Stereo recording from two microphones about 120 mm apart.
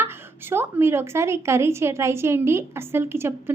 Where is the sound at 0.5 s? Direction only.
20° right (ahead or behind).